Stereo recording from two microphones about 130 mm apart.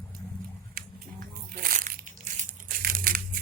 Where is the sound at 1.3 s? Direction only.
90° right.